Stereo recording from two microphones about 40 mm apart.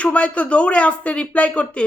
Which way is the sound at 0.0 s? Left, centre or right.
Left.